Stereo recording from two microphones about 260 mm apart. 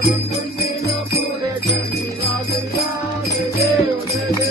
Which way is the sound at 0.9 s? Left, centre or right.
Left.